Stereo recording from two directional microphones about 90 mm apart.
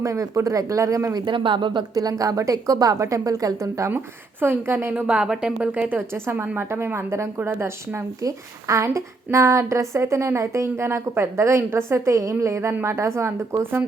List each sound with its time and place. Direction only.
0.0 s speech: 35° right (ahead or behind)
1.3 s speech: 60° right (ahead or behind)
2.0 s speech: 40° right (ahead or behind)
3.9 s a woman's voice: 25° right (ahead or behind)
5.0 s a woman's voice: 10° right (ahead or behind); by 13.8 s 30° right (ahead or behind)